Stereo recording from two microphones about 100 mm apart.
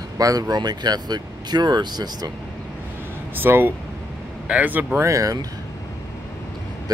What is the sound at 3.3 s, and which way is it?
Speech, 20° right (ahead or behind).